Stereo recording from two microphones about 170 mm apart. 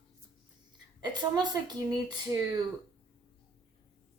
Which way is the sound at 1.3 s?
25° right (ahead or behind).